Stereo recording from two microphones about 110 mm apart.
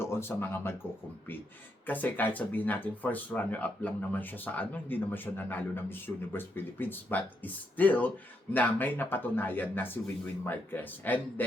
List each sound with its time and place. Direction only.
0.0 s speech: 20° left (ahead or behind)
1.9 s speech: 15° left (ahead or behind)